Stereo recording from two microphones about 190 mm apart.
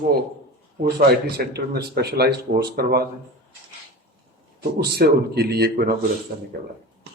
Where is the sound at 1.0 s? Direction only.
60° right (ahead or behind).